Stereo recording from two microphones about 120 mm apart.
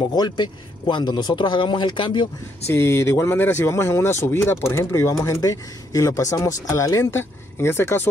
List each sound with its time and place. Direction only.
0.1 s speech: 35° left (ahead or behind)
2.7 s speech: 20° left (ahead or behind)